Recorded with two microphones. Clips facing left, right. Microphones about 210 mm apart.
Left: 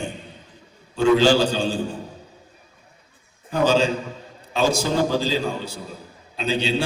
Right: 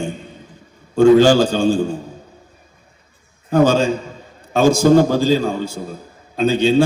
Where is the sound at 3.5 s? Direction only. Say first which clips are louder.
Right 5 dB; 45° right (ahead or behind).